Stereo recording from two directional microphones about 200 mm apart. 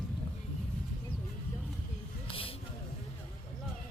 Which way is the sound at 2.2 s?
25° left (ahead or behind).